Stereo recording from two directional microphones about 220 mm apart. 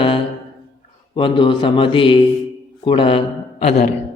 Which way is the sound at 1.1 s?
20° left (ahead or behind).